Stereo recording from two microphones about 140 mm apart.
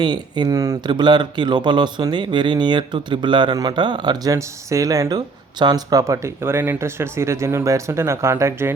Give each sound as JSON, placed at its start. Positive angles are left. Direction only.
{"t": 0.0, "sound": "speech", "side_deg": -30}